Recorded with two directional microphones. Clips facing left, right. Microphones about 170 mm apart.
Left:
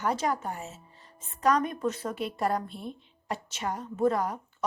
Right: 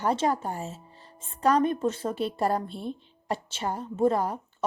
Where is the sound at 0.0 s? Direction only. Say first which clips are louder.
Right 3 dB; 30° right (ahead or behind).